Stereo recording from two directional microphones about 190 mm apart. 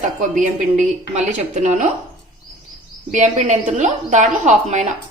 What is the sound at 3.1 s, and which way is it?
A woman's voice, 40° right (ahead or behind).